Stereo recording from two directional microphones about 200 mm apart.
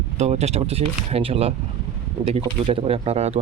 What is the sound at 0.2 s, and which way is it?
Speech, 35° right (ahead or behind).